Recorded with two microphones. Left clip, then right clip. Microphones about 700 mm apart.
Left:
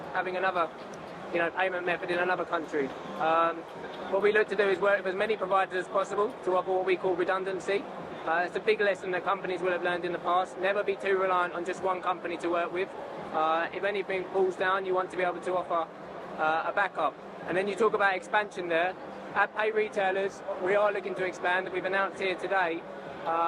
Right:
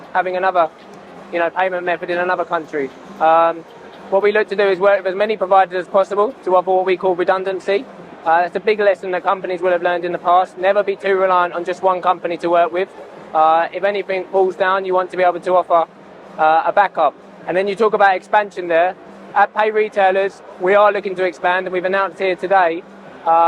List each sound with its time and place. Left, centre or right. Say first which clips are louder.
0.2 s speech: right 13 dB; right